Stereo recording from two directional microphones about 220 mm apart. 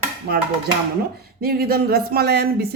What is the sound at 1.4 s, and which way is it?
Speech, 45° right (ahead or behind).